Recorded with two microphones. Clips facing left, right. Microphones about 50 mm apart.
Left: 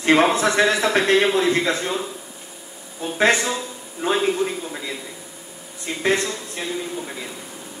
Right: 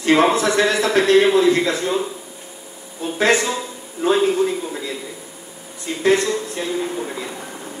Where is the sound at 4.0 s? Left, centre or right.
Centre.